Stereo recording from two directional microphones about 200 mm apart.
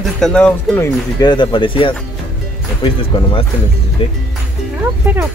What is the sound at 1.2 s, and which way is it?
Speech, 20° left (ahead or behind).